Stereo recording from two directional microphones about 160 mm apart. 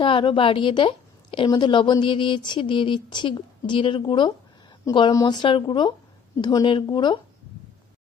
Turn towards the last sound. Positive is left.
turn(degrees=30)  # may be behind; listen again after turning